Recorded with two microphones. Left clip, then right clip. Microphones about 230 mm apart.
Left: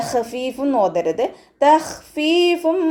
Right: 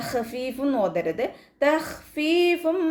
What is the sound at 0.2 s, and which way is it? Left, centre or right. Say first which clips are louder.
A woman's voice: left 6 dB; centre.